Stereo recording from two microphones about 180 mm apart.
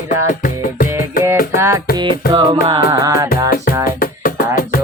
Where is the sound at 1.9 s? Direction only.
25° right (ahead or behind).